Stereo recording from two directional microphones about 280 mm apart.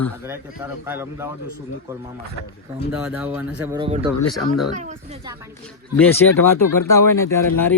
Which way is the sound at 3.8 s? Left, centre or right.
Centre.